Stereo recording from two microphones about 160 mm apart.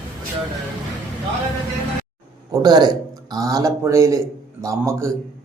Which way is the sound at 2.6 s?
25° right (ahead or behind).